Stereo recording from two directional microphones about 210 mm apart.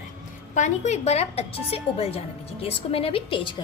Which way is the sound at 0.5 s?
35° left (ahead or behind).